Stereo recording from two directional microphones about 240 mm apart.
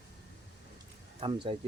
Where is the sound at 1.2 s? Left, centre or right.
Right.